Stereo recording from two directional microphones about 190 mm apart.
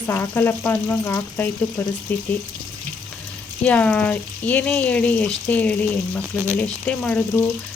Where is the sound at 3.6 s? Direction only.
5° left (ahead or behind).